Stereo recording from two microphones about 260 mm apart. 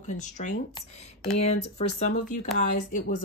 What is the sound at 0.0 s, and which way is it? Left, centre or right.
Speech, left.